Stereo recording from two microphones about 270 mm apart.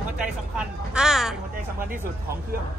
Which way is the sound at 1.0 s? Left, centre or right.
Centre.